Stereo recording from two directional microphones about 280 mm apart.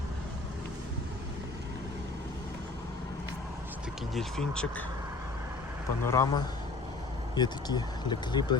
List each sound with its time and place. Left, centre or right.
4.1 s speech: centre
6.1 s speech: centre